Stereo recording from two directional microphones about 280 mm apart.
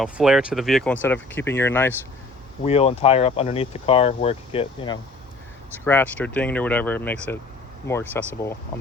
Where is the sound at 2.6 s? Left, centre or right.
Left.